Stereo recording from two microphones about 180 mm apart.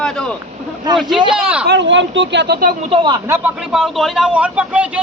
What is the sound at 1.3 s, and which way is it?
Speech, 5° right (ahead or behind).